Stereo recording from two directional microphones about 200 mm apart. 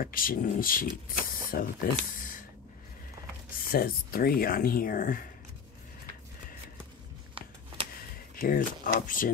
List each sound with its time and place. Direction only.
0.0 s speech: 45° left (ahead or behind)
3.7 s speech: 50° left (ahead or behind)
7.3 s a sound: 25° right (ahead or behind)
8.4 s speech: 45° left (ahead or behind)